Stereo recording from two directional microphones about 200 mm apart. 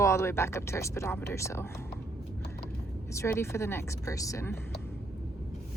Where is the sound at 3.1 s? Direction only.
15° left (ahead or behind).